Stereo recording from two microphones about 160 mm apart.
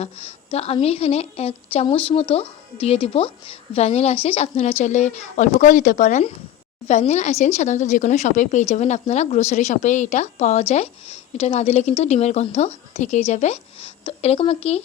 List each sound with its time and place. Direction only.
0.5 s a woman's voice: 40° left (ahead or behind)